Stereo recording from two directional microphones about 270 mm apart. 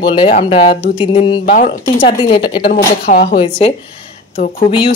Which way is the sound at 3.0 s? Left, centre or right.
Left.